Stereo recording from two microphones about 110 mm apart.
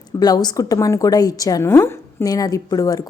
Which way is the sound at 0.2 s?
35° left (ahead or behind).